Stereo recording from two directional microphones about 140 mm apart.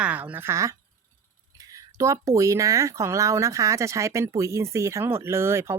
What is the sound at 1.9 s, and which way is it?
Speech, 20° right (ahead or behind).